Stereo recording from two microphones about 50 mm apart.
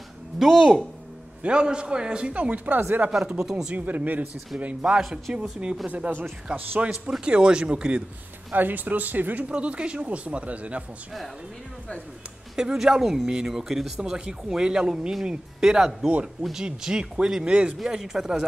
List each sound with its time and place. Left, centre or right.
0.4 s speech: centre
1.4 s a man's voice: centre
3.1 s speech: centre
3.7 s a man's voice: right
5.3 s speech: centre
5.9 s a man's voice: right
6.5 s a man's voice: centre
8.5 s speech: right
9.5 s a man's voice: right
12.5 s speech: centre
17.7 s speech: centre